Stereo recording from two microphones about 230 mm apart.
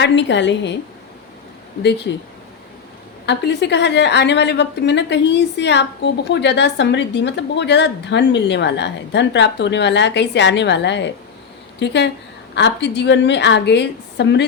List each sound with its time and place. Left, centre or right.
0.0 s a woman's voice: left
1.8 s a woman's voice: left
3.2 s a woman's voice: left